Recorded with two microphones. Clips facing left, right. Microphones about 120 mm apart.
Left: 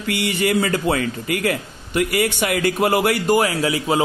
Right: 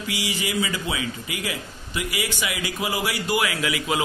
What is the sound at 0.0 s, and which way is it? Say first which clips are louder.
A man's voice: left 7 dB; 60° left (ahead or behind).